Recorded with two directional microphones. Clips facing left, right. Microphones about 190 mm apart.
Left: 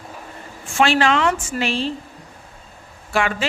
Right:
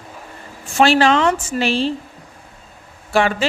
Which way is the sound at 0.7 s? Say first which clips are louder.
Right 3 dB; 35° right (ahead or behind).